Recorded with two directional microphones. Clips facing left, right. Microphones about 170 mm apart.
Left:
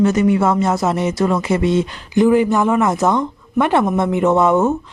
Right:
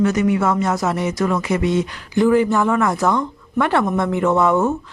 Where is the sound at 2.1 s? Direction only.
15° left (ahead or behind).